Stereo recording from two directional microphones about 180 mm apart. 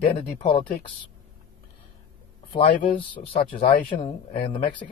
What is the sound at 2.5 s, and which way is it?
Speech, 30° left (ahead or behind).